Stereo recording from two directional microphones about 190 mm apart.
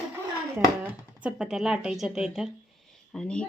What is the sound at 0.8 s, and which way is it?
Speech, 5° right (ahead or behind).